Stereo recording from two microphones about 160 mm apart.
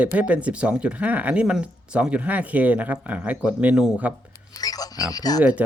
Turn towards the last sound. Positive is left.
turn(degrees=25)  # may be behind; listen again after turning